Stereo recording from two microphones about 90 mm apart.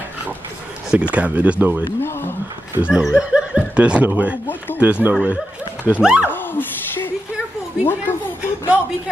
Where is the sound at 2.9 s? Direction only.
5° right (ahead or behind).